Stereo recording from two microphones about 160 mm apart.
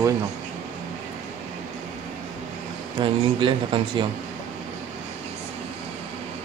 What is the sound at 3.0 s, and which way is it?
Speech, 30° right (ahead or behind).